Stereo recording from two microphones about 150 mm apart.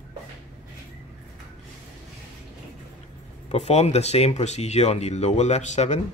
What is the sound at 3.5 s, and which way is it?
Speech, 50° left (ahead or behind).